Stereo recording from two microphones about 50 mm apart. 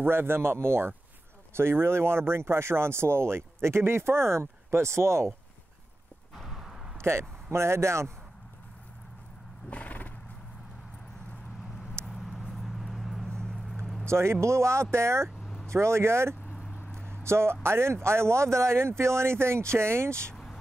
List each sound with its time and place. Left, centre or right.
0.0 s a man's voice: right
6.3 s a sound: centre
7.0 s speech: right
9.7 s horse: left
12.1 s vehicle: centre
13.3 s a sound: centre
14.0 s speech: right